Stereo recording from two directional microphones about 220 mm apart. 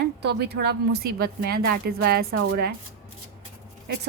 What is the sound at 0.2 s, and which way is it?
A woman's voice, 50° right (ahead or behind).